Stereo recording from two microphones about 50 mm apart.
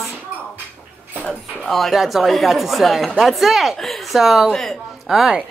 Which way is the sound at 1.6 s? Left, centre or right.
Centre.